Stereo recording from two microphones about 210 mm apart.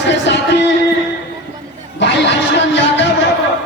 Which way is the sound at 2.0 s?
55° left (ahead or behind).